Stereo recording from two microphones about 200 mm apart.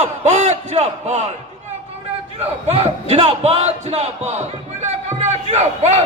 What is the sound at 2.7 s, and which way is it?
Speech, 30° right (ahead or behind).